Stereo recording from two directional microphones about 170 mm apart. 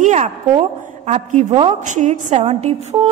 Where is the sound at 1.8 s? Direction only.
45° right (ahead or behind).